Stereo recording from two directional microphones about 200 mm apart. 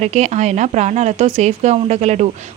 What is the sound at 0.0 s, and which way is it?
Speech, 35° right (ahead or behind).